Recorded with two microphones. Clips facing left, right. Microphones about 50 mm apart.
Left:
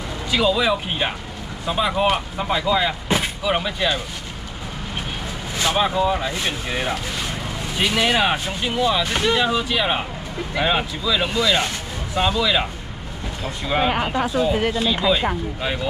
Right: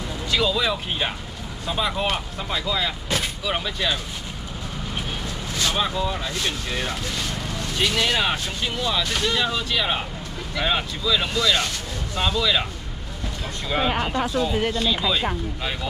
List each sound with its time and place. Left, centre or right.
0.3 s speech: centre
5.6 s speech: centre
13.7 s speech: centre